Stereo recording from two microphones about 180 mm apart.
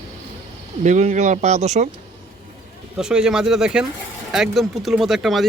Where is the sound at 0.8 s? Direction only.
40° right (ahead or behind).